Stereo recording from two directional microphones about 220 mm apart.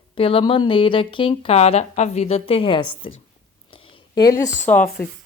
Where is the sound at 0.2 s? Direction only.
25° left (ahead or behind).